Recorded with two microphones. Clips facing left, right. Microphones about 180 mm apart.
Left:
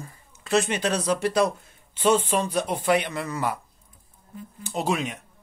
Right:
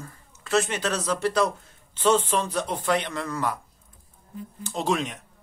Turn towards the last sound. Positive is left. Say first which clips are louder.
# even
turn(degrees=5)  # may be behind; listen again after turning